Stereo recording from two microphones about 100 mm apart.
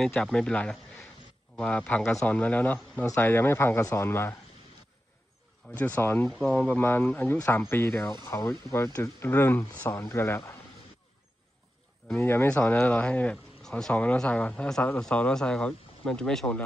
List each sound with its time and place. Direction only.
0.1 s speech: 10° left (ahead or behind); by 4.4 s 25° left (ahead or behind)
5.8 s speech: 20° left (ahead or behind)
6.2 s speech: 5° left (ahead or behind)
6.5 s speech: 15° left (ahead or behind)
12.2 s speech: 20° left (ahead or behind)